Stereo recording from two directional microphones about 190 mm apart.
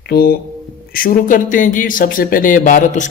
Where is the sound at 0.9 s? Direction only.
45° left (ahead or behind).